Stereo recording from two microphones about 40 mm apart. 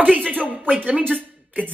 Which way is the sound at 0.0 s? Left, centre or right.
Right.